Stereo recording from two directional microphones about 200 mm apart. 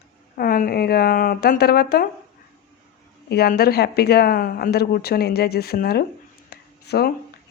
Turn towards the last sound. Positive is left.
turn(degrees=50)  # may be behind; listen again after turning